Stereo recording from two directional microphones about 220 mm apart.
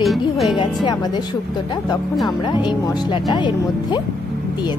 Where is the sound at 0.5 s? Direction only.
20° left (ahead or behind).